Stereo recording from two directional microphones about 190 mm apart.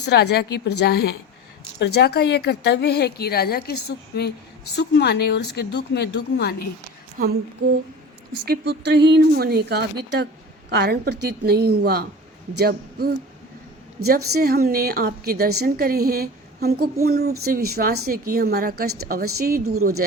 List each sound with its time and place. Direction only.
0.0 s a woman's voice: 60° left (ahead or behind)
7.2 s a woman's voice: 50° right (ahead or behind)